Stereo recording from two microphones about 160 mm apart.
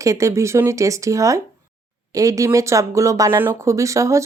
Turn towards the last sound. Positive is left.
turn(degrees=-20)  # may be behind; listen again after turning